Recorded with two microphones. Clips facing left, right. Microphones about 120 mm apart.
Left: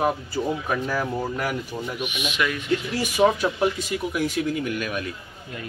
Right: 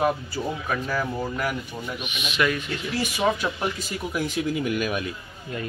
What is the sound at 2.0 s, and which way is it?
Speech, 15° left (ahead or behind).